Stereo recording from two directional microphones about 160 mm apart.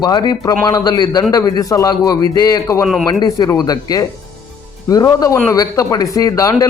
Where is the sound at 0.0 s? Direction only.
25° left (ahead or behind).